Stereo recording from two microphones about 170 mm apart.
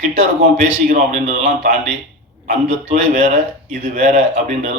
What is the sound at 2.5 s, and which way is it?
A man's voice, 40° right (ahead or behind).